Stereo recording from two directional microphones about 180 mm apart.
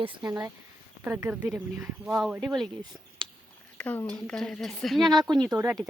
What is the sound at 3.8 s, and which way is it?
Speech, 10° left (ahead or behind).